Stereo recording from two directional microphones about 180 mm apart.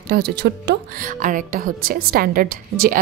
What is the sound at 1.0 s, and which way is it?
A woman's voice, 45° right (ahead or behind).